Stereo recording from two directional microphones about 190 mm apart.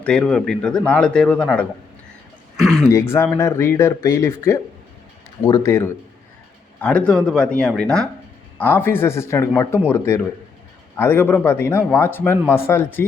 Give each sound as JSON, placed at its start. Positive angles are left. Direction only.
{"t": 0.0, "sound": "speech", "side_deg": 5}
{"t": 2.9, "sound": "speech", "side_deg": 15}
{"t": 10.9, "sound": "speech", "side_deg": 10}